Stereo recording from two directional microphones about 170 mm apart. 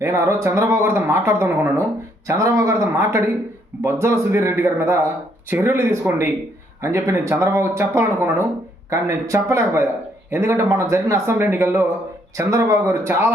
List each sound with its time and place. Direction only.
0.0 s speech: 15° right (ahead or behind)